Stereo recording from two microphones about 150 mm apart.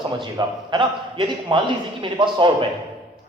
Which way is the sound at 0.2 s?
30° right (ahead or behind).